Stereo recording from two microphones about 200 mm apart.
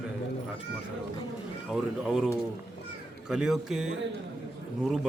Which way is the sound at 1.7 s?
5° right (ahead or behind).